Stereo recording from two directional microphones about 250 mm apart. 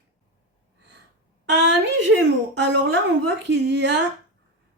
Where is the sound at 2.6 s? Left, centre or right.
Right.